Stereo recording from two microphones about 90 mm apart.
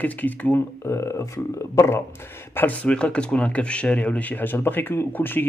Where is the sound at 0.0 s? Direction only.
20° left (ahead or behind).